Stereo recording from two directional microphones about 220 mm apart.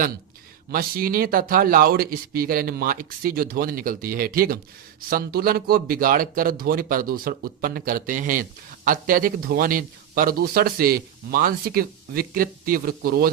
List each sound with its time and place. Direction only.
0.7 s speech: 40° right (ahead or behind)